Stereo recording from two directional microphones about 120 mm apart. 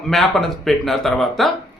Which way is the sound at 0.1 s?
Centre (ahead or behind).